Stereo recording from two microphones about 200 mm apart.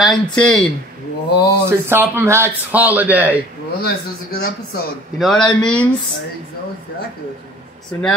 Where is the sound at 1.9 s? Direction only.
10° right (ahead or behind).